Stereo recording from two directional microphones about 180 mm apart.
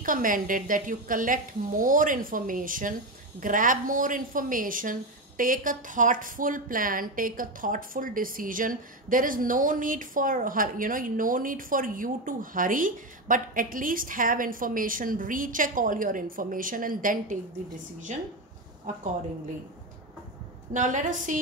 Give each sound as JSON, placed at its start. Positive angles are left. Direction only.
{"t": 0.0, "sound": "a woman's voice", "side_deg": -50}
{"t": 20.7, "sound": "a woman's voice", "side_deg": -45}